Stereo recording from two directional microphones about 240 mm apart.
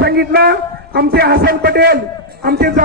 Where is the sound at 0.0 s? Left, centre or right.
Right.